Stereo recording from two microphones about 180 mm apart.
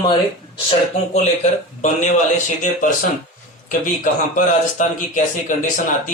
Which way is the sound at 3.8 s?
45° left (ahead or behind).